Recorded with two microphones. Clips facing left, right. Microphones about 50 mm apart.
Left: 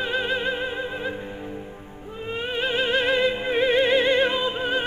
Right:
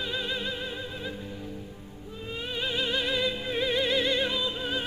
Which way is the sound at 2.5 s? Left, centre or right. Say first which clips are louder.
Left 7 dB; left.